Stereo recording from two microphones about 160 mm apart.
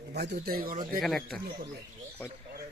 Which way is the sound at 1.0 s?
5° left (ahead or behind).